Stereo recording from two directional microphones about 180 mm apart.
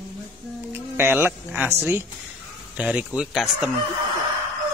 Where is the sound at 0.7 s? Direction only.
10° right (ahead or behind).